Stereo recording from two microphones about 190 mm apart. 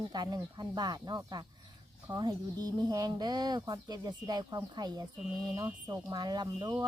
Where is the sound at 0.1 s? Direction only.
20° right (ahead or behind).